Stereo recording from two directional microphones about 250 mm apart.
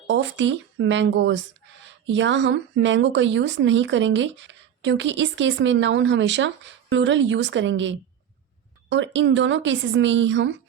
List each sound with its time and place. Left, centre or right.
0.1 s speech: right